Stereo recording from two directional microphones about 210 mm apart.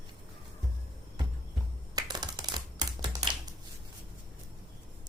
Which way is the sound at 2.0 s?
20° right (ahead or behind).